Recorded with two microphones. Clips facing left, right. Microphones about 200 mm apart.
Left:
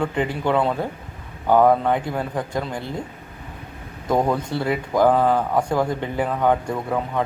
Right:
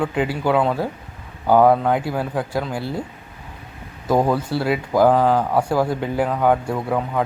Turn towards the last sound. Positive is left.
turn(degrees=-5)  # may be behind; listen again after turning